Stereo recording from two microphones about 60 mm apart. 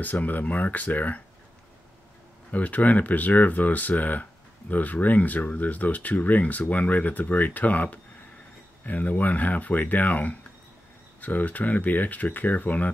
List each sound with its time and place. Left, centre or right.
0.0 s speech: left
2.5 s speech: left